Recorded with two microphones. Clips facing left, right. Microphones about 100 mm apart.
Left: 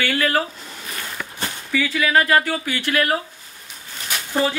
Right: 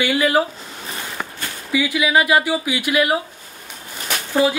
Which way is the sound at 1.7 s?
15° right (ahead or behind).